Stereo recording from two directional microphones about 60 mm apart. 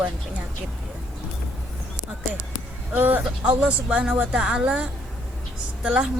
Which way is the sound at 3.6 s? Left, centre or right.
Centre.